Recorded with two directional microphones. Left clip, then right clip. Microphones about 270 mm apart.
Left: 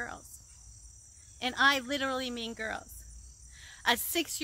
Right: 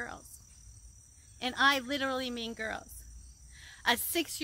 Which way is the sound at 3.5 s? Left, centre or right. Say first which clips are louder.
Left 1 dB; centre.